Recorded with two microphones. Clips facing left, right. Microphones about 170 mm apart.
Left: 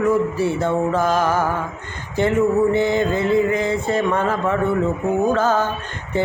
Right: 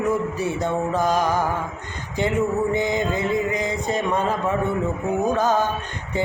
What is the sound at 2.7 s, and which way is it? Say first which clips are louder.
Mantra: left 4 dB; 15° right (ahead or behind).